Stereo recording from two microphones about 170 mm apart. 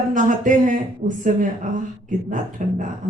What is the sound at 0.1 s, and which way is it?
Speech, 50° right (ahead or behind).